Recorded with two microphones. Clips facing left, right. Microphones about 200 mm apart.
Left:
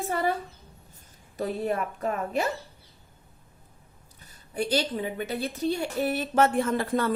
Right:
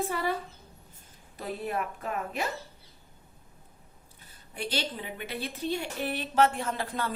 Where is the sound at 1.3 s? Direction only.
45° left (ahead or behind).